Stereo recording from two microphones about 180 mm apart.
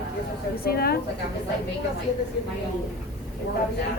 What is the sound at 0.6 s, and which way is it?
Speech, 60° left (ahead or behind).